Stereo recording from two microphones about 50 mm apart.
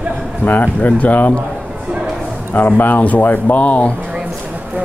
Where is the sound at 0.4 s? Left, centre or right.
Left.